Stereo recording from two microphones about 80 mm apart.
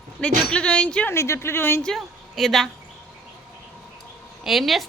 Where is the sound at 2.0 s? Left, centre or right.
Centre.